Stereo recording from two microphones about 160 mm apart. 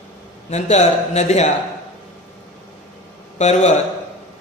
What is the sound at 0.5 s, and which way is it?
Speech, 45° left (ahead or behind).